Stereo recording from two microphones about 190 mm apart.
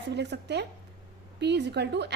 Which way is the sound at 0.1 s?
65° right (ahead or behind).